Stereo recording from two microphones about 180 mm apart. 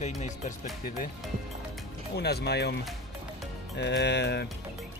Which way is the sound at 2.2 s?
65° left (ahead or behind).